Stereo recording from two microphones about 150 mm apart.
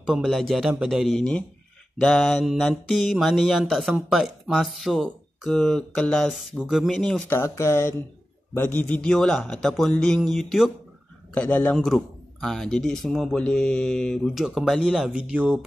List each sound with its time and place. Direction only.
0.0 s mantra: 5° right (ahead or behind)
7.2 s speech: 20° left (ahead or behind)
8.5 s mantra: 10° left (ahead or behind); by 15.6 s 10° right (ahead or behind)